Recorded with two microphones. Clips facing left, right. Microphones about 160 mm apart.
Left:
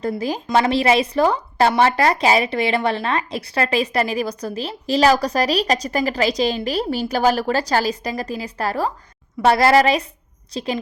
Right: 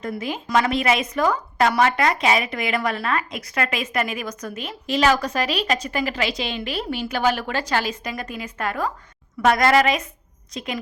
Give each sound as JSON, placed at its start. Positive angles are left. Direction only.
{"t": 0.0, "sound": "a woman's voice", "side_deg": 35}